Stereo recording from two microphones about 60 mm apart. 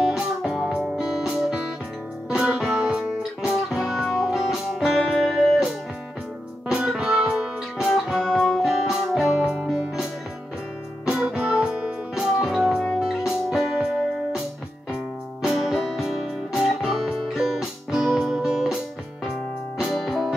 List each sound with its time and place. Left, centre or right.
0.0 s music: centre
6.9 s music: centre
11.1 s music: centre
15.4 s music: centre
19.8 s keyboard: centre